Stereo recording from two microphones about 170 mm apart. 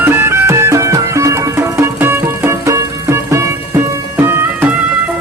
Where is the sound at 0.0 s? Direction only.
15° right (ahead or behind).